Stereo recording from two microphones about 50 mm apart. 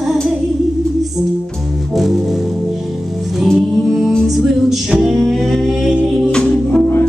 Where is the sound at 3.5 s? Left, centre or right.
Centre.